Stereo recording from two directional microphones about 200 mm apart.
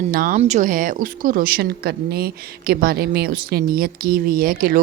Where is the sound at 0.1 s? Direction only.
45° right (ahead or behind).